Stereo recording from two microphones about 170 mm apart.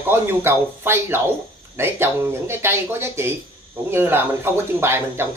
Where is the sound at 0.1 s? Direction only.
15° right (ahead or behind).